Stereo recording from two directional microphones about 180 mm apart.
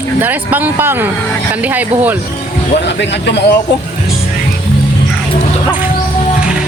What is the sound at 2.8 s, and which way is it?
Speech, 70° left (ahead or behind).